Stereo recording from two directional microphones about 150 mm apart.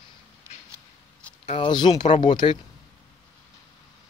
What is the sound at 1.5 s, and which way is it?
Speech, 30° left (ahead or behind).